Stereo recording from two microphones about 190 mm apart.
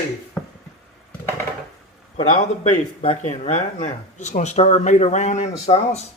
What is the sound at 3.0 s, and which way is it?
Speech, 35° left (ahead or behind).